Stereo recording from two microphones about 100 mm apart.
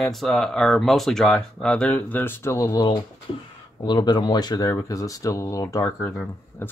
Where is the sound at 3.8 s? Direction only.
50° left (ahead or behind).